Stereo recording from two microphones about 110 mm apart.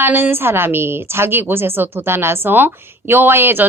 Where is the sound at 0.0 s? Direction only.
20° right (ahead or behind).